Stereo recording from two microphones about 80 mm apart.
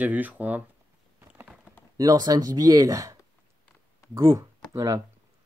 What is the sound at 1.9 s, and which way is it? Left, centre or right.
Speech, right.